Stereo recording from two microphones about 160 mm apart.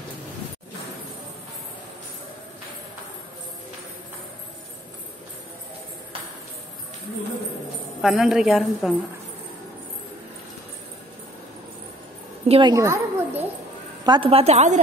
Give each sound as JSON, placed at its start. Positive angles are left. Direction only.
{"t": 8.0, "sound": "a woman's voice", "side_deg": -5}
{"t": 12.4, "sound": "a woman's voice", "side_deg": -35}
{"t": 12.7, "sound": "a sound", "side_deg": -20}
{"t": 14.0, "sound": "a woman's voice", "side_deg": -30}